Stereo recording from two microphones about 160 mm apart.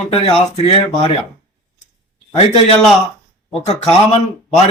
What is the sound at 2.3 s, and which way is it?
Speech, 35° left (ahead or behind).